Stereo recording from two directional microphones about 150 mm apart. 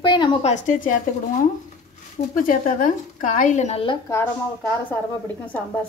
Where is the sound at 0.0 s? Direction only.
35° left (ahead or behind).